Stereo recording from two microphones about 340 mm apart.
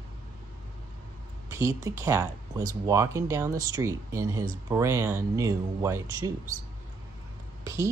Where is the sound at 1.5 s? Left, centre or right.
Centre.